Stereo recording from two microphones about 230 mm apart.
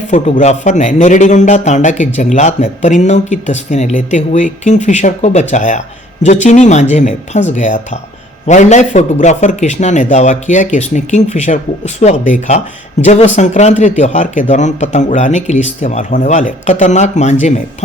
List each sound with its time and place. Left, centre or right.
0.1 s speech: left